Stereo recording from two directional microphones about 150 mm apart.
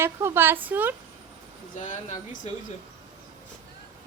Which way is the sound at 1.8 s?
60° left (ahead or behind).